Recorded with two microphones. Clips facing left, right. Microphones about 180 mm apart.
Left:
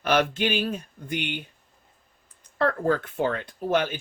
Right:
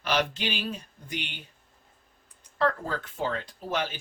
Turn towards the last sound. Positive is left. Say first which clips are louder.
# left 7 dB
turn(degrees=55)  # may be behind; listen again after turning